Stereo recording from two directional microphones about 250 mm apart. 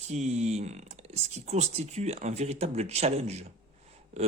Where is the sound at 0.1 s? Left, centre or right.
Right.